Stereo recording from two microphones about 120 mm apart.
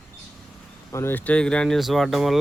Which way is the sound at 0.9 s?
20° left (ahead or behind).